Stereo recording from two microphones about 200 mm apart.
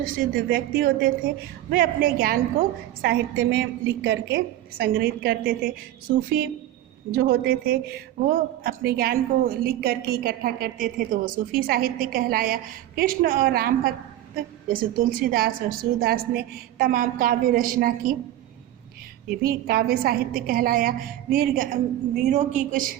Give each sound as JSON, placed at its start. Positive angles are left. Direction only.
{"t": 0.2, "sound": "a woman's voice", "side_deg": -50}
{"t": 7.1, "sound": "a woman's voice", "side_deg": -55}
{"t": 19.4, "sound": "a woman's voice", "side_deg": -50}